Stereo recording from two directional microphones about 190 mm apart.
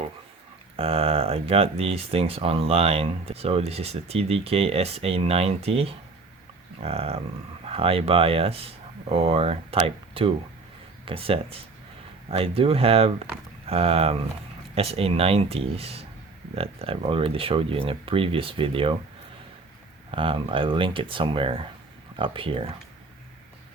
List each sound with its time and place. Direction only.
0.8 s speech: 30° right (ahead or behind)
20.1 s speech: 30° right (ahead or behind)